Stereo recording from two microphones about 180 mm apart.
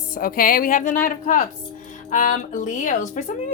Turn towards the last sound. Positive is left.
turn(degrees=45)  # may be behind; listen again after turning